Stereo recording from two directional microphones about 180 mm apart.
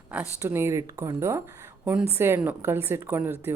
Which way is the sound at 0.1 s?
10° right (ahead or behind).